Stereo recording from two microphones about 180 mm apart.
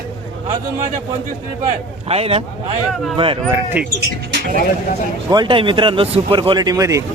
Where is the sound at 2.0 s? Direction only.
35° right (ahead or behind).